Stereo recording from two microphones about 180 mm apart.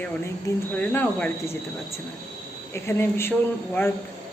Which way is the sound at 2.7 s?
15° left (ahead or behind).